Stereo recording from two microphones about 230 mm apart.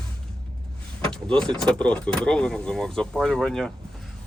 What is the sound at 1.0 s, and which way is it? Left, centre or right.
Speech, centre.